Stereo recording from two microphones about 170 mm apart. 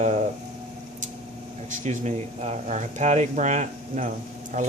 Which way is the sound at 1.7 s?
45° right (ahead or behind).